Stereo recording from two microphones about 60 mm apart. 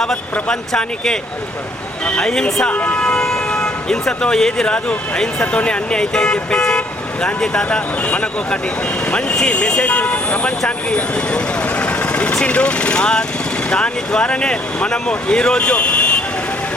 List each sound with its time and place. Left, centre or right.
0.8 s speech: centre
2.6 s speech: left
10.7 s vehicle: centre
12.3 s speech: centre